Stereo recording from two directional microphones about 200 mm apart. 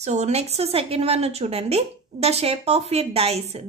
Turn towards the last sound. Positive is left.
turn(degrees=-30)  # may be behind; listen again after turning